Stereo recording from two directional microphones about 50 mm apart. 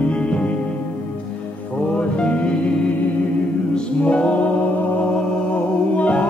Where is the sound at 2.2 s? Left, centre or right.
Left.